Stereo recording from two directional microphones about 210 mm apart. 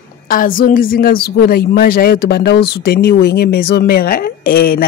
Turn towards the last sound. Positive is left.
turn(degrees=45)  # may be behind; listen again after turning